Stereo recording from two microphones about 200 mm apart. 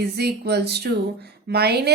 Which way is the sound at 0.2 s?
55° right (ahead or behind).